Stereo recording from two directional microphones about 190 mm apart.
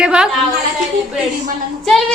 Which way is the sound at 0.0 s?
5° right (ahead or behind).